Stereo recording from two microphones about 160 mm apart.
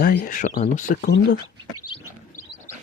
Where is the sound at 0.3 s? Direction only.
55° left (ahead or behind).